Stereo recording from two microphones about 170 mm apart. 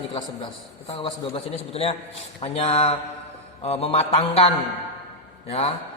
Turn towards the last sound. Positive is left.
turn(degrees=35)  # may be behind; listen again after turning